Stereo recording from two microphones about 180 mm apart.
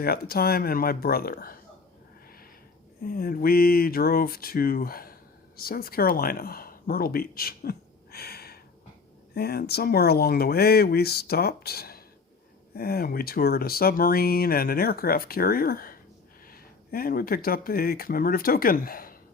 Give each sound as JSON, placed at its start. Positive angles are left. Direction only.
{"t": 0.0, "sound": "speech", "side_deg": 55}
{"t": 3.0, "sound": "speech", "side_deg": 55}